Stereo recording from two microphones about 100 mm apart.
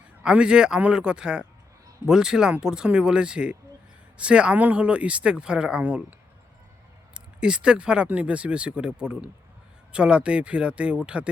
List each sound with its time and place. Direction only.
0.2 s speech: 10° right (ahead or behind)